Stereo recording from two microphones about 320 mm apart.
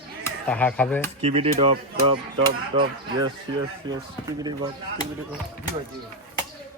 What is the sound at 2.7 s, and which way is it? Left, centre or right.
Speech, centre.